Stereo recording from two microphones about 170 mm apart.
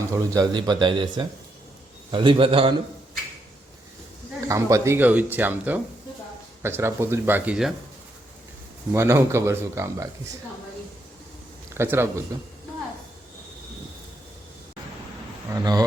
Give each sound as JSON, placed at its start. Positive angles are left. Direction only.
{"t": 0.1, "sound": "speech", "side_deg": -20}
{"t": 4.4, "sound": "speech", "side_deg": -20}
{"t": 8.9, "sound": "speech", "side_deg": -15}
{"t": 11.7, "sound": "speech", "side_deg": -15}
{"t": 15.5, "sound": "speech", "side_deg": -20}